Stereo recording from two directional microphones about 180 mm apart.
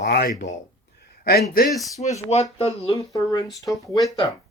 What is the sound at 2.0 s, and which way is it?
Speech, 35° left (ahead or behind).